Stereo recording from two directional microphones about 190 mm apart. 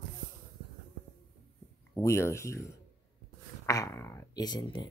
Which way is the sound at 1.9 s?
15° left (ahead or behind).